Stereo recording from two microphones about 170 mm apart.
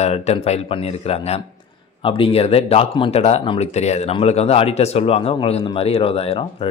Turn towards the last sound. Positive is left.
turn(degrees=35)  # may be behind; listen again after turning